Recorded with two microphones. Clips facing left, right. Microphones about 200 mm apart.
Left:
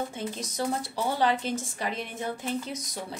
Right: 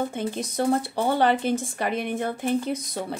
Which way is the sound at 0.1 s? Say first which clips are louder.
Right 6 dB; 55° right (ahead or behind).